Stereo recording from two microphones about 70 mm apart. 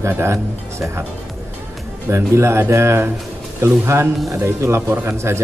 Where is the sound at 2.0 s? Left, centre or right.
Right.